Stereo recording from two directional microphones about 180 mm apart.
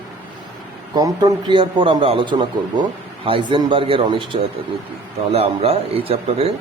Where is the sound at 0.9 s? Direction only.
20° right (ahead or behind).